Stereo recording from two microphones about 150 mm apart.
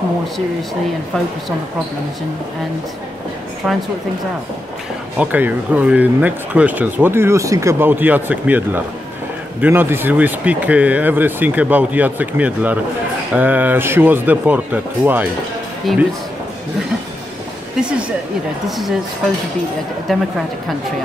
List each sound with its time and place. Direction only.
5.1 s speech: 10° right (ahead or behind)
15.9 s a man's voice: centre (ahead or behind)
17.7 s speech: 5° right (ahead or behind)
20.1 s a man's voice: centre (ahead or behind)